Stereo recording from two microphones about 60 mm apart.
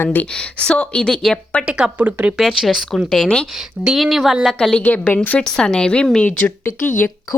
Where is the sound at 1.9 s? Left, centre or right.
Right.